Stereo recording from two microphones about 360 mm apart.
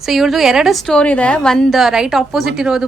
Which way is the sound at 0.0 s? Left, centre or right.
Centre.